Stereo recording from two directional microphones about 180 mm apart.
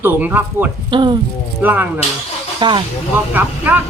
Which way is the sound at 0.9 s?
25° right (ahead or behind).